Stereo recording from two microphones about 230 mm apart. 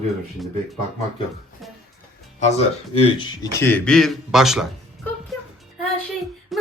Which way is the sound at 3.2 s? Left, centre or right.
Centre.